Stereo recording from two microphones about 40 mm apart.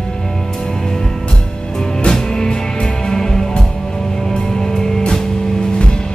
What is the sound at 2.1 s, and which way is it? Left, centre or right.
Music, centre.